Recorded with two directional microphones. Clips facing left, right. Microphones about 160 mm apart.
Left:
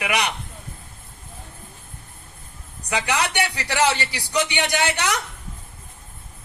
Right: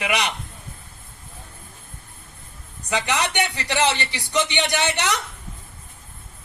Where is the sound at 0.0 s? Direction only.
25° right (ahead or behind).